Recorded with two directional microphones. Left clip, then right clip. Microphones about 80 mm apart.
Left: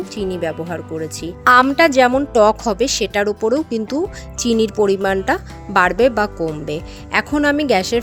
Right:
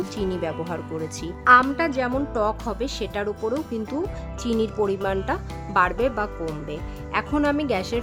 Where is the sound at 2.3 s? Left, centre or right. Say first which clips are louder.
Left 11 dB; left.